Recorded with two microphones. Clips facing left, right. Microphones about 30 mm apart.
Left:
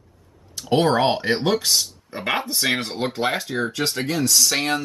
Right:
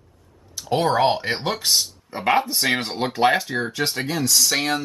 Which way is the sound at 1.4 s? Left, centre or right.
Centre.